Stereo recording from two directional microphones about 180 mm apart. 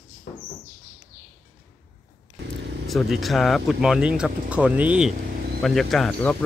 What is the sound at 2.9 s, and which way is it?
Speech, centre (ahead or behind).